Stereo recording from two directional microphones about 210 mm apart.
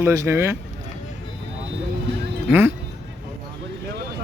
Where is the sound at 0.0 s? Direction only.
15° right (ahead or behind).